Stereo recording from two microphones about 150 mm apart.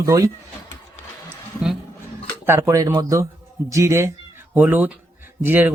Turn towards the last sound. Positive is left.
turn(degrees=-15)  # may be behind; listen again after turning